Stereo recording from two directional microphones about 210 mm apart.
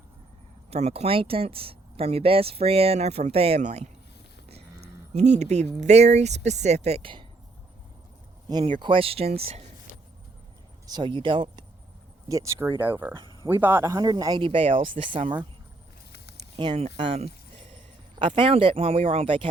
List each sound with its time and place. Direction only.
0.7 s speech: 30° right (ahead or behind)
5.1 s speech: 35° right (ahead or behind)
8.4 s speech: 20° right (ahead or behind)
10.8 s speech: 20° right (ahead or behind)
13.1 s a sound: 25° right (ahead or behind)
13.5 s speech: 10° right (ahead or behind)
16.6 s speech: 25° right (ahead or behind)